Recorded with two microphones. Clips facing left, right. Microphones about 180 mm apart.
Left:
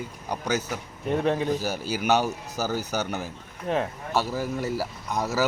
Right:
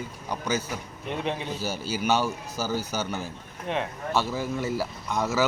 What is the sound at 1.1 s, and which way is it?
Speech, 45° left (ahead or behind).